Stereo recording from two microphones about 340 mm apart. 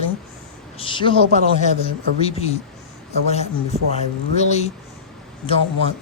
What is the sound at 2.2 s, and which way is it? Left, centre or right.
A man's voice, centre.